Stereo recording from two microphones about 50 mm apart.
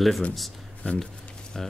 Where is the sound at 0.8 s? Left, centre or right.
Left.